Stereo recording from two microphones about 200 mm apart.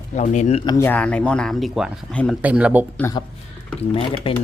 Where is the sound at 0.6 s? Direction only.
20° left (ahead or behind).